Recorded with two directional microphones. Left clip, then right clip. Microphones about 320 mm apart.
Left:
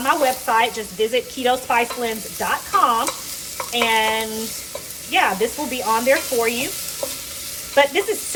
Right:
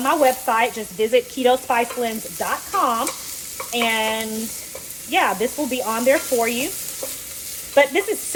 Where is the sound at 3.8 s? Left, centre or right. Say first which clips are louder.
Left 3 dB; centre.